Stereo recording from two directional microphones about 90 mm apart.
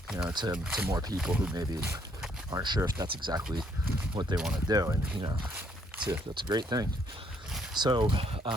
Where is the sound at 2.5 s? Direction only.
50° right (ahead or behind).